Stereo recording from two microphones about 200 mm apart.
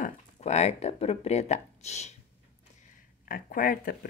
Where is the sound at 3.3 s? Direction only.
45° left (ahead or behind).